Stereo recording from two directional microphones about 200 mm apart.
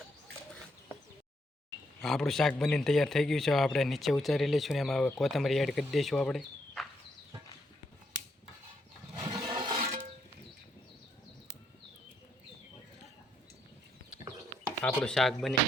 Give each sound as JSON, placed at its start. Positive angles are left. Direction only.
{"t": 2.0, "sound": "a man's voice", "side_deg": 0}
{"t": 9.1, "sound": "music", "side_deg": -20}
{"t": 14.8, "sound": "a man's voice", "side_deg": 5}